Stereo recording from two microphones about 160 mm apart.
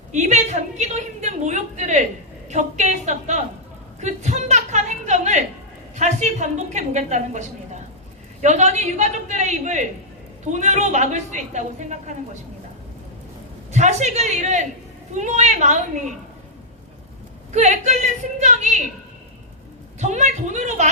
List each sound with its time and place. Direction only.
0.1 s a woman's voice: 45° right (ahead or behind)
13.7 s a woman's voice: 45° right (ahead or behind)
17.5 s a woman's voice: 45° right (ahead or behind)
20.0 s a woman's voice: 45° right (ahead or behind)